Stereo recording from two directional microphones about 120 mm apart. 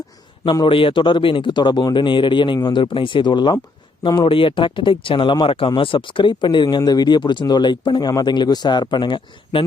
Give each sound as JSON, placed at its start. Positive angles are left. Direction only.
{"t": 0.6, "sound": "speech", "side_deg": 45}